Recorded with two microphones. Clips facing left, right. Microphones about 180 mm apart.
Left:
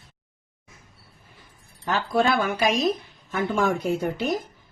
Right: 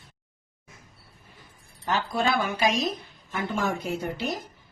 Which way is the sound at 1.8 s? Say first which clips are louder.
Left 4 dB; 55° left (ahead or behind).